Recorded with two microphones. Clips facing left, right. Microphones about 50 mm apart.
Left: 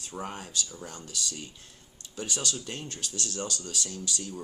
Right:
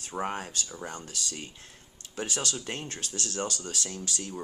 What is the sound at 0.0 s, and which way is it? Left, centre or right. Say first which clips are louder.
Speech: right 5 dB; right.